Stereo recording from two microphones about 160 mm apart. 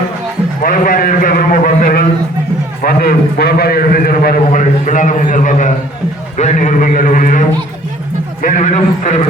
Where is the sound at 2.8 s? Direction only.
65° left (ahead or behind).